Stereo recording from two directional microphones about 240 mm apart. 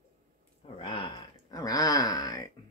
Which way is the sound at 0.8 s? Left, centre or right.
Centre.